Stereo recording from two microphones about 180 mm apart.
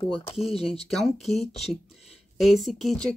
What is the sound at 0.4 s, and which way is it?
Speech, centre (ahead or behind).